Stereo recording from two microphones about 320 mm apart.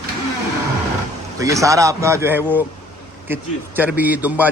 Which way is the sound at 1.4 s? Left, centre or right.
Centre.